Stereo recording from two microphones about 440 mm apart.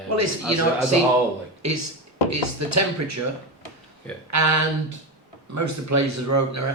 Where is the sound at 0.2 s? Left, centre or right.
Right.